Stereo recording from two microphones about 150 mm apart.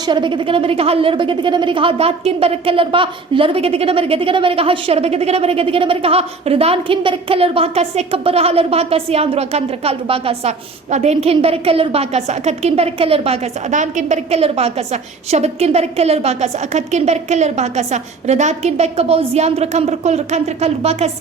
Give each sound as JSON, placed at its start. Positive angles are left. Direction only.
{"t": 0.0, "sound": "a woman's voice", "side_deg": -30}